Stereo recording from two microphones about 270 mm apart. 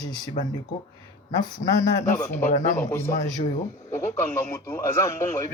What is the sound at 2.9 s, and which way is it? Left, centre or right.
Speech, centre.